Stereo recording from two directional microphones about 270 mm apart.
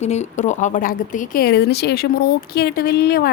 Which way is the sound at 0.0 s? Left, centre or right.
Left.